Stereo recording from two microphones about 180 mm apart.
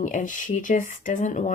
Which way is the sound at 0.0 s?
45° left (ahead or behind).